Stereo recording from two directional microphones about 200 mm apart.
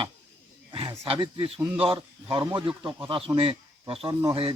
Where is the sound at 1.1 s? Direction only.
25° right (ahead or behind).